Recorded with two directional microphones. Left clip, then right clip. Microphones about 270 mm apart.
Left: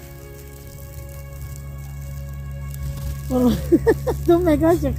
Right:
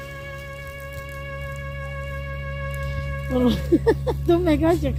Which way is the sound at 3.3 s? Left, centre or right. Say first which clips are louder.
Left 2 dB; right.